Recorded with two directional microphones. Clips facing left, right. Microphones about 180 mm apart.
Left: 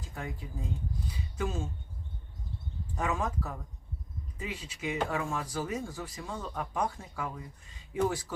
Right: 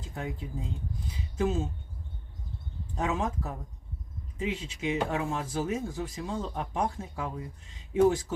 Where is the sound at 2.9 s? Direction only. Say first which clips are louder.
Right 2 dB; 25° right (ahead or behind).